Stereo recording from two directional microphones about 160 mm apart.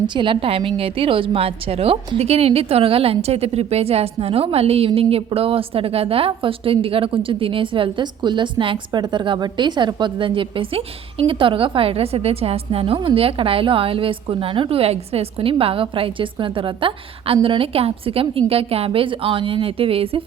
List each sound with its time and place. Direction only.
0.1 s a woman's voice: 30° right (ahead or behind)